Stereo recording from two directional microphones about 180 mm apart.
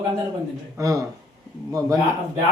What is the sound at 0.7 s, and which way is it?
Speech, 20° right (ahead or behind).